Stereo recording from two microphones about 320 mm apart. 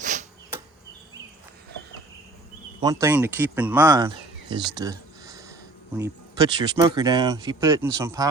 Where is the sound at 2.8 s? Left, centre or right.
Centre.